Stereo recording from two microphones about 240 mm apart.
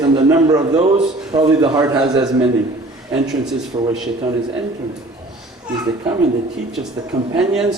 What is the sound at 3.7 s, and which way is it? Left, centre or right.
Speech, centre.